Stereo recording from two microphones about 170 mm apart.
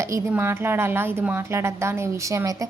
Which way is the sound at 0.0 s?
15° right (ahead or behind).